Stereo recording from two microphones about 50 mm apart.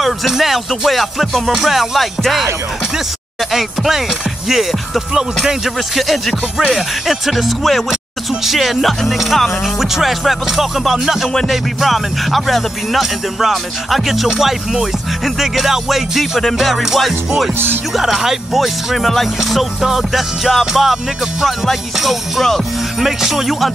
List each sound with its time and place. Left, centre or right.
0.0 s speech: centre
3.5 s speech: centre
14.3 s speech: centre